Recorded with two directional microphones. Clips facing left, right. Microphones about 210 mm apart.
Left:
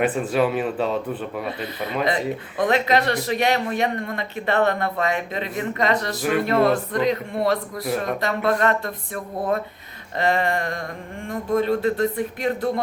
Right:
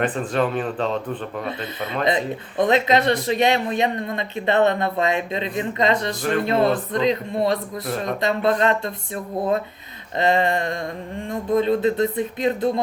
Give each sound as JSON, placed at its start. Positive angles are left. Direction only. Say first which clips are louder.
{"t": 0.0, "sound": "a man's voice", "louder": "left 1 dB", "side_deg": 5}
{"t": 2.0, "sound": "speech", "louder": "right 1 dB", "side_deg": -20}
{"t": 10.2, "sound": "speech", "louder": "right 2 dB", "side_deg": -20}